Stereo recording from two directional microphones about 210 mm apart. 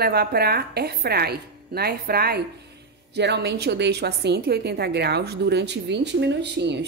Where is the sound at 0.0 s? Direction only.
50° right (ahead or behind).